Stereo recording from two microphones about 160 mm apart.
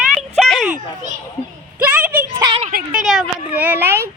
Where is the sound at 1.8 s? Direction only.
10° right (ahead or behind).